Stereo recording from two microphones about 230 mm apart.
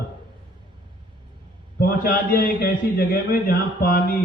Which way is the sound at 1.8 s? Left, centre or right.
Left.